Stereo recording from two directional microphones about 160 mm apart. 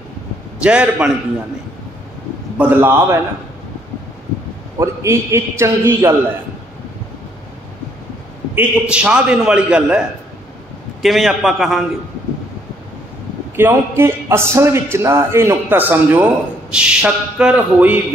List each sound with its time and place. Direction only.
0.6 s a man's voice: 5° right (ahead or behind)
2.5 s a man's voice: 10° right (ahead or behind)
4.7 s a man's voice: 15° right (ahead or behind)
8.5 s a man's voice: 5° right (ahead or behind)
13.6 s a man's voice: 15° right (ahead or behind)